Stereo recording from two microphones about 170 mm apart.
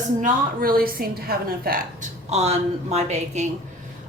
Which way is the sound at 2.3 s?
40° right (ahead or behind).